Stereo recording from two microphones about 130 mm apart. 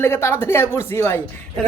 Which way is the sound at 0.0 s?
20° left (ahead or behind).